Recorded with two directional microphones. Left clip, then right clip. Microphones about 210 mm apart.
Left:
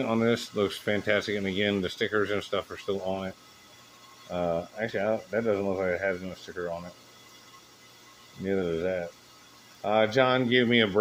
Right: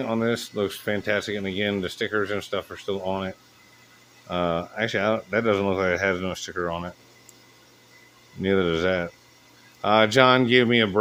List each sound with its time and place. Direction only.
0.0 s speech: 10° right (ahead or behind); by 6.8 s 35° right (ahead or behind)
8.4 s speech: 35° right (ahead or behind)